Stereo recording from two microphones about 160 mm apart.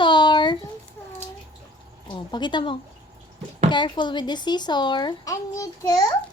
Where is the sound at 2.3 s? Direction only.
30° left (ahead or behind).